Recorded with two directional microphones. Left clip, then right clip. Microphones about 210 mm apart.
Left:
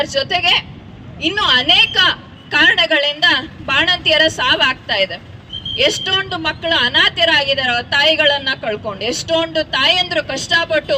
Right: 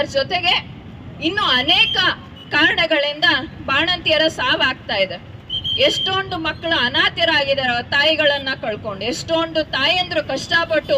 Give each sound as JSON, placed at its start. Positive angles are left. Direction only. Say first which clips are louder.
{"t": 0.0, "sound": "a woman's voice", "louder": "left 2 dB", "side_deg": 20}